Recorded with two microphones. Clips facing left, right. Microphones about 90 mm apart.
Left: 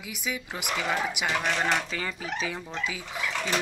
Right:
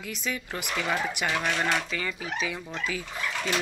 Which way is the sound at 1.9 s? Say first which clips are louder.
Even; 30° left (ahead or behind).